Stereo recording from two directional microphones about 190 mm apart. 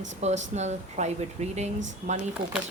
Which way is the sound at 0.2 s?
35° right (ahead or behind).